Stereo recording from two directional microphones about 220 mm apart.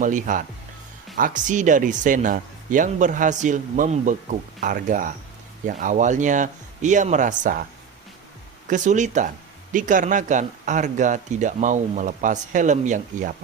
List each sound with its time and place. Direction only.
0.0 s speech: 35° right (ahead or behind)
8.6 s speech: 35° right (ahead or behind)